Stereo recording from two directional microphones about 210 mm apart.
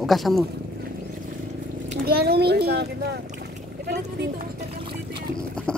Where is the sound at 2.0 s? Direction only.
50° right (ahead or behind).